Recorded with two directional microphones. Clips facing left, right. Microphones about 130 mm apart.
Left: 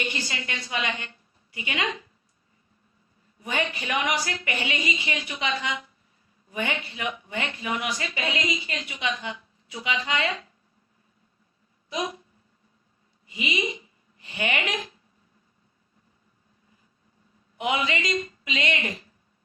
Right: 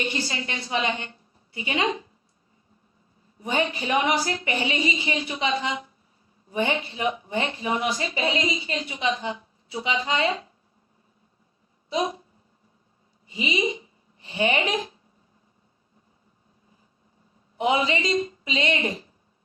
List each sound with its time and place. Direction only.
0.0 s a woman's voice: 30° right (ahead or behind)
3.4 s a woman's voice: 30° right (ahead or behind)
11.9 s speech: 30° right (ahead or behind)
13.2 s a woman's voice: 30° right (ahead or behind)
17.6 s speech: 30° right (ahead or behind)